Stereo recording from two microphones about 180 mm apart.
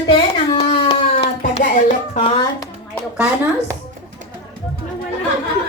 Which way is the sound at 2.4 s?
20° left (ahead or behind).